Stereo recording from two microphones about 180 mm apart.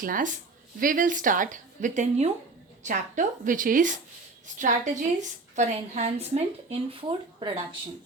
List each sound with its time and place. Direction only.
0.0 s a woman's voice: 45° right (ahead or behind); by 7.5 s 30° right (ahead or behind)